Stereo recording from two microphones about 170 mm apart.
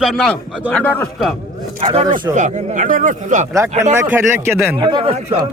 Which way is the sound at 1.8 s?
35° right (ahead or behind).